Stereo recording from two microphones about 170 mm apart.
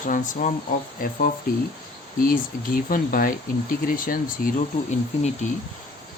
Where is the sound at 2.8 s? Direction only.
55° left (ahead or behind).